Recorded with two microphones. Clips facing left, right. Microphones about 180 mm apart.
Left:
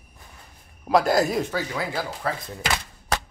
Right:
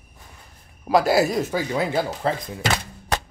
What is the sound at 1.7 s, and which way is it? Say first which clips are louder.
Speech: right 6 dB; 25° right (ahead or behind).